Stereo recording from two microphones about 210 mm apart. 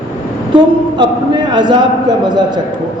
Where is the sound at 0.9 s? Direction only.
20° right (ahead or behind).